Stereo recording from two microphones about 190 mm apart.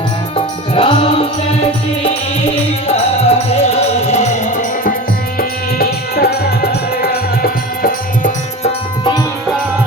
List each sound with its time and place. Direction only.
0.3 s music: 30° left (ahead or behind)
2.8 s music: 35° left (ahead or behind)
5.4 s music: 50° left (ahead or behind)
8.6 s music: 25° left (ahead or behind)